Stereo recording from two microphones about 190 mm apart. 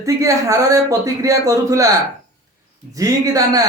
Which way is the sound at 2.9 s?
20° right (ahead or behind).